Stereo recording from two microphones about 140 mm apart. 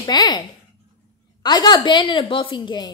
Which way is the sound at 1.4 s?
30° left (ahead or behind).